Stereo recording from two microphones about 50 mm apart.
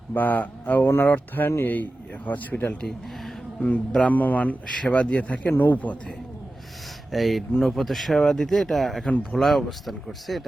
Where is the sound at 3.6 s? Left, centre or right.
Left.